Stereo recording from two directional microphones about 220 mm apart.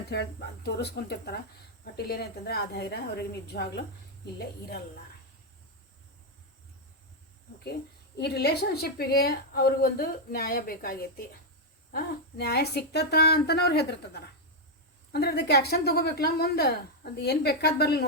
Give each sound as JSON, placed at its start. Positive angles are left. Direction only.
{"t": 0.1, "sound": "speech", "side_deg": 50}
{"t": 8.2, "sound": "speech", "side_deg": 45}